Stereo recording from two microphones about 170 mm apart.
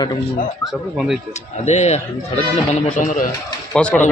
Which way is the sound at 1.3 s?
40° left (ahead or behind).